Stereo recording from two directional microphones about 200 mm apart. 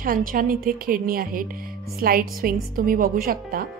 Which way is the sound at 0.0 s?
45° right (ahead or behind).